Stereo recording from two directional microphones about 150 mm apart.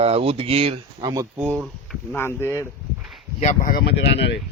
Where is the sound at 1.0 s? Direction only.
25° right (ahead or behind).